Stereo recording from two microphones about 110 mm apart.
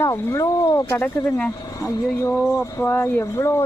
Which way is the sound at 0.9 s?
15° left (ahead or behind).